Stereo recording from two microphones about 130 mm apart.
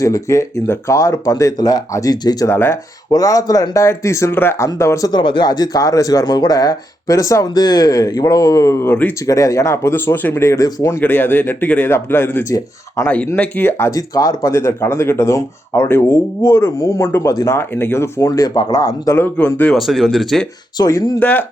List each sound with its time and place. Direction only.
0.0 s speech: 25° left (ahead or behind)
2.5 s speech: 20° left (ahead or behind)
9.2 s speech: 25° left (ahead or behind)
19.7 s speech: centre (ahead or behind)
20.7 s speech: 30° left (ahead or behind)
21.2 s speech: 10° left (ahead or behind)